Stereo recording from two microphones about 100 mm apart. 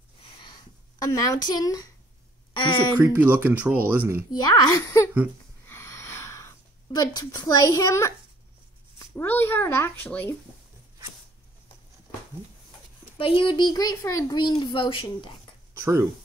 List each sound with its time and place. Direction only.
0.9 s a child's voice: 35° left (ahead or behind)
2.5 s speech: 55° left (ahead or behind)
3.0 s speech: 20° right (ahead or behind)
4.3 s a child's voice: 45° left (ahead or behind)
5.7 s a sound: 25° left (ahead or behind)
7.0 s a child's voice: 35° left (ahead or behind)
9.2 s a child's voice: 20° left (ahead or behind)
13.2 s speech: 60° left (ahead or behind)
13.6 s a child's voice: 40° left (ahead or behind)
14.4 s speech: 50° left (ahead or behind)
15.7 s a sound: 30° right (ahead or behind)